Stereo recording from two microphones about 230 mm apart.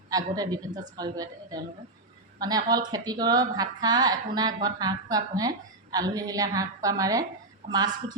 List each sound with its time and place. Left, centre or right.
0.1 s a woman's voice: centre